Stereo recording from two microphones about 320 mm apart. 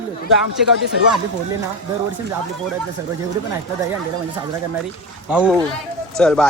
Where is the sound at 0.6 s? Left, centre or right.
Centre.